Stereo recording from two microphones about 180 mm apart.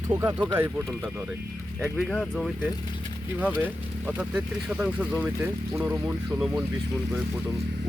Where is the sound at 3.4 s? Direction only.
10° right (ahead or behind).